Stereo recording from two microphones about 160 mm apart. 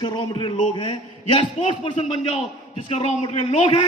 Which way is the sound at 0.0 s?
30° left (ahead or behind).